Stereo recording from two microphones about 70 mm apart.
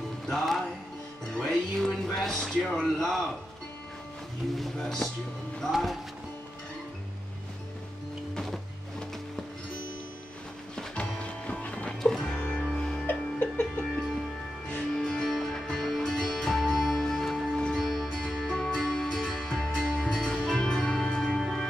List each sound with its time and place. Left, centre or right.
0.3 s music: centre
1.9 s speech: centre
4.6 s speech: centre
10.8 s music: centre
13.0 s music: left
15.0 s music: centre